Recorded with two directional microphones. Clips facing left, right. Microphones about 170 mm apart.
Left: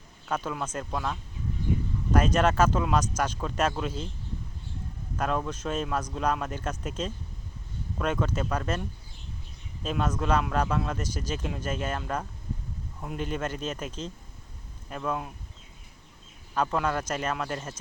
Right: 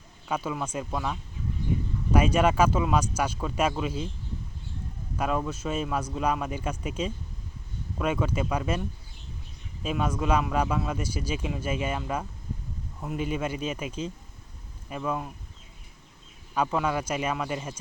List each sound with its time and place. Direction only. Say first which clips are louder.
0.3 s speech: right 1 dB; 10° right (ahead or behind)
5.1 s speech: right 1 dB; 5° right (ahead or behind)
9.8 s speech: right 1 dB; 10° right (ahead or behind)
16.6 s speech: right 1 dB; 5° right (ahead or behind)